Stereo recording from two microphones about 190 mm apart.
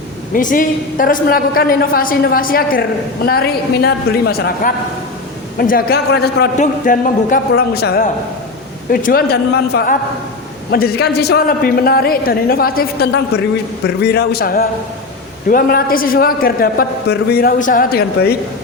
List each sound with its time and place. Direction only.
0.3 s a man's voice: 45° left (ahead or behind)